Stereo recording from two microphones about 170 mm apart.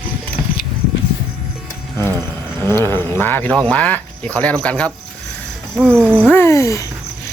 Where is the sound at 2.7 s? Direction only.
15° left (ahead or behind).